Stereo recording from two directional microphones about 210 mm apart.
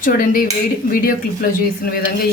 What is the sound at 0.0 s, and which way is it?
A woman's voice, 40° left (ahead or behind).